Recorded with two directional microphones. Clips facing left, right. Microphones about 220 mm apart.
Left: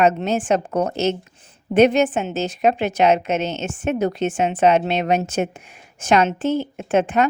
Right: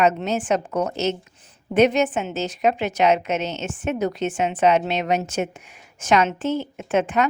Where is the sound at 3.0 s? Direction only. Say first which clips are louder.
Left 2 dB; 30° left (ahead or behind).